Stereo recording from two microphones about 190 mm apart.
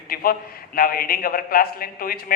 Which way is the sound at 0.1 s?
50° left (ahead or behind).